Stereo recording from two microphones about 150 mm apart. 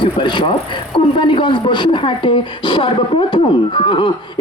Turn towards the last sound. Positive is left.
turn(degrees=35)  # may be behind; listen again after turning